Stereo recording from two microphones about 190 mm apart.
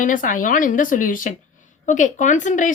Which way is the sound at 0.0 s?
45° left (ahead or behind).